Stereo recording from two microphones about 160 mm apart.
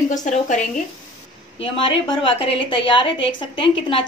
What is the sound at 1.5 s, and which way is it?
A woman's voice, 35° left (ahead or behind).